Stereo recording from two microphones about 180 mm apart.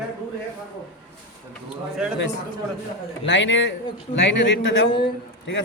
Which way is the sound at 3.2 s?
90° left.